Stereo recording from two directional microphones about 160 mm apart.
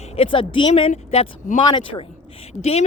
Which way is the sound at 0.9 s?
45° left (ahead or behind).